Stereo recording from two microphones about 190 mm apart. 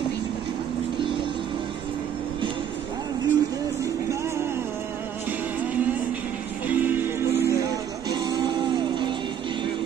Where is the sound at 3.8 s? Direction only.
15° right (ahead or behind).